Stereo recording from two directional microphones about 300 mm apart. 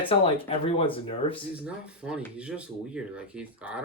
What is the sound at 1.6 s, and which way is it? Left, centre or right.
Speech, centre.